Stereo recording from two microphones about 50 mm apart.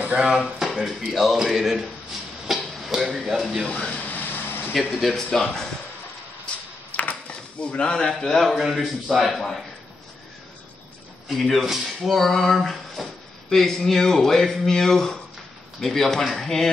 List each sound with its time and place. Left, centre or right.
0.2 s speech: centre
2.4 s music: centre
3.9 s air conditioning: left
4.9 s speech: centre
6.9 s a sound: left
7.6 s speech: left; by 9.6 s centre
11.3 s speech: centre
11.6 s speech: centre